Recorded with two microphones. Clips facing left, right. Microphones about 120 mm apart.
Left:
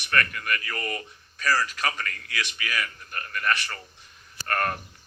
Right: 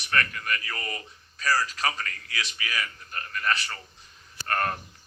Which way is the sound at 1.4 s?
35° right (ahead or behind).